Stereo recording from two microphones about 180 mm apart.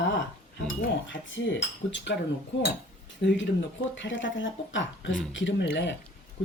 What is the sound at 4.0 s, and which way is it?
Speech, 90° left.